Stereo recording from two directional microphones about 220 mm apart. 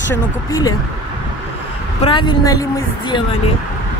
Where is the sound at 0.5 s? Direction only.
15° left (ahead or behind).